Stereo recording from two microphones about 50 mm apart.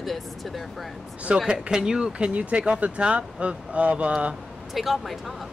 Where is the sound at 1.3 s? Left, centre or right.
Right.